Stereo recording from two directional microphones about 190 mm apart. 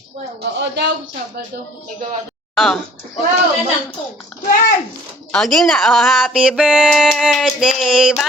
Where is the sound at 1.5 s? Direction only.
55° right (ahead or behind).